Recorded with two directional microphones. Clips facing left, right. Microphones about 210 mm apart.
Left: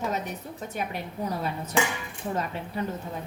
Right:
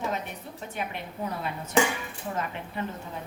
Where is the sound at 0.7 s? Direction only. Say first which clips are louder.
Left 2 dB; 40° left (ahead or behind).